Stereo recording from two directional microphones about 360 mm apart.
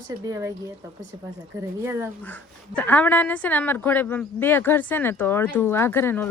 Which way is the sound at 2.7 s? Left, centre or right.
Centre.